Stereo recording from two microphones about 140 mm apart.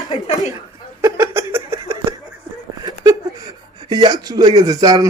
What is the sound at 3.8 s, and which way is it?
Speech, 30° right (ahead or behind).